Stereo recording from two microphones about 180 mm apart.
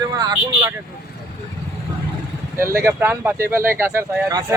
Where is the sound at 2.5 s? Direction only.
15° right (ahead or behind).